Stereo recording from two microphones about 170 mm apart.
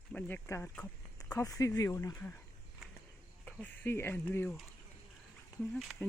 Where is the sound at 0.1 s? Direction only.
10° left (ahead or behind).